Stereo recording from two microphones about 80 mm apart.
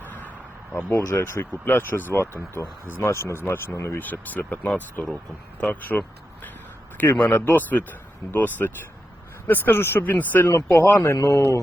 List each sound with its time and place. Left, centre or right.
0.7 s speech: left
0.9 s speech: left
1.2 s speech: left
4.0 s a man's voice: left
11.2 s speech: left